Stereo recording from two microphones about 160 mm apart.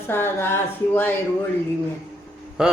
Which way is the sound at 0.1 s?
15° left (ahead or behind).